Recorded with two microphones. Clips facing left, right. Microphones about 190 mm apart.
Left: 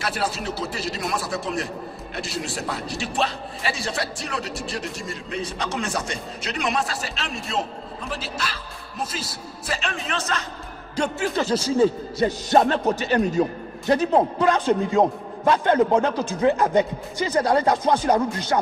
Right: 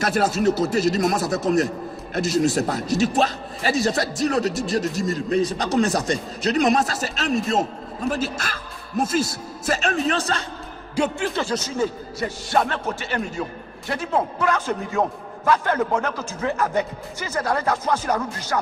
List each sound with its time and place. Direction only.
0.0 s a man's voice: 45° right (ahead or behind)
11.0 s a man's voice: 10° right (ahead or behind)
11.5 s speech: 30° left (ahead or behind)
12.5 s a man's voice: 20° left (ahead or behind)
16.5 s speech: 20° left (ahead or behind)